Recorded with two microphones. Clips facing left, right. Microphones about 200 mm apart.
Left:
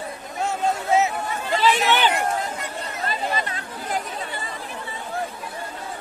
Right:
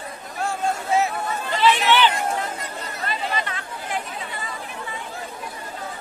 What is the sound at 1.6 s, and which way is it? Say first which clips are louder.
Chatter: right 2 dB; 40° left (ahead or behind).